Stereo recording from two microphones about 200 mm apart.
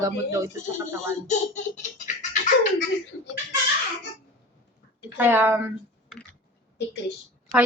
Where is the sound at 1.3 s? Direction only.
35° left (ahead or behind).